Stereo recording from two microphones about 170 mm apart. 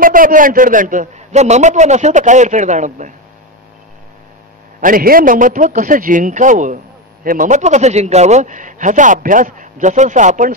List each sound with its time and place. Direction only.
0.0 s a man's voice: 55° right (ahead or behind)
4.7 s a man's voice: 55° right (ahead or behind)